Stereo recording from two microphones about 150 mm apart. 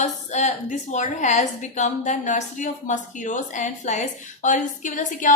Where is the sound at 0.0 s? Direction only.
50° left (ahead or behind).